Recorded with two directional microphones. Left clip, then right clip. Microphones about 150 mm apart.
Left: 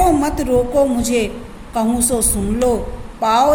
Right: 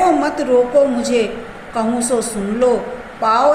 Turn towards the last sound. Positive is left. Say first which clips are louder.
# even
turn(degrees=55)  # may be behind; listen again after turning